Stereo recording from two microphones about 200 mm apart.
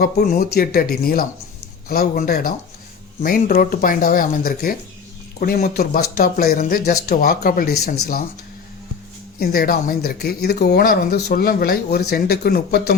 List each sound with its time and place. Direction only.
0.0 s speech: 45° left (ahead or behind)
9.4 s speech: 50° left (ahead or behind)